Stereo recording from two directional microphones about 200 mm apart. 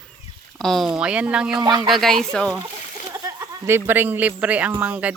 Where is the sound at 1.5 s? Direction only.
20° right (ahead or behind).